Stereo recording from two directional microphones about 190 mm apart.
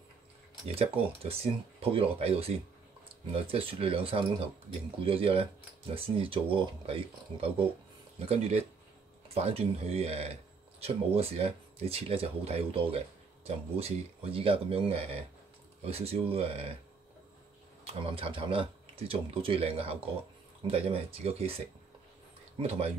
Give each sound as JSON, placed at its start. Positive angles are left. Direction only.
{"t": 0.7, "sound": "speech", "side_deg": -30}
{"t": 18.0, "sound": "speech", "side_deg": -30}
{"t": 22.6, "sound": "speech", "side_deg": -35}